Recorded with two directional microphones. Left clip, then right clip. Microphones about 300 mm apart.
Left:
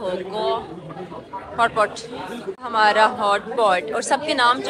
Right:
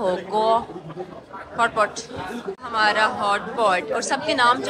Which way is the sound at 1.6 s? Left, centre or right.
Centre.